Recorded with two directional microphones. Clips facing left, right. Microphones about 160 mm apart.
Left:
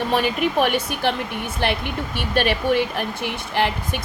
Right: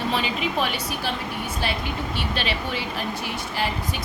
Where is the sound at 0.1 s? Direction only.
55° left (ahead or behind).